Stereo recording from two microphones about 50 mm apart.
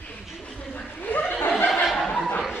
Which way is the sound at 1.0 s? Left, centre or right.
Left.